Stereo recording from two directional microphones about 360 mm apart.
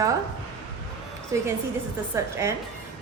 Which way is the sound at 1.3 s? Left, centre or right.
Centre.